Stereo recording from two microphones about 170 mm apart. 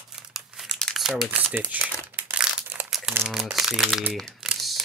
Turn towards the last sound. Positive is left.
turn(degrees=0)  # may be behind; listen again after turning